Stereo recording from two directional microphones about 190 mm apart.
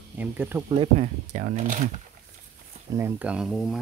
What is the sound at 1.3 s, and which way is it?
Speech, 45° right (ahead or behind).